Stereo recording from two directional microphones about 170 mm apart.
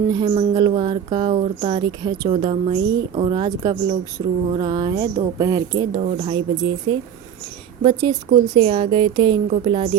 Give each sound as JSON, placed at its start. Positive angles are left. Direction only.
{"t": 0.1, "sound": "speech", "side_deg": -30}
{"t": 6.0, "sound": "speech", "side_deg": -35}
{"t": 7.8, "sound": "speech", "side_deg": -35}